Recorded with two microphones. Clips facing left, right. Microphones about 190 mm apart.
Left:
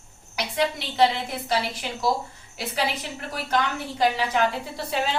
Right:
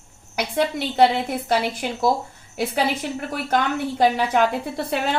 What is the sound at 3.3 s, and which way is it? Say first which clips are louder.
A woman's voice: right 2 dB; 50° right (ahead or behind).